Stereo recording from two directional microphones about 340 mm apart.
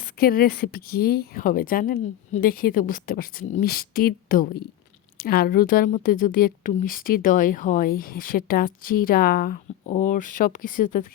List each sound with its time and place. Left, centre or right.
0.2 s a woman's voice: left